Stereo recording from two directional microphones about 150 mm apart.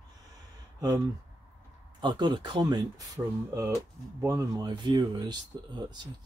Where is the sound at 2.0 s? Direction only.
30° right (ahead or behind).